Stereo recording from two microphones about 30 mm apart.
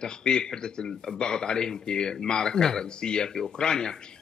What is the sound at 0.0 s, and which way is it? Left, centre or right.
A man's voice, left.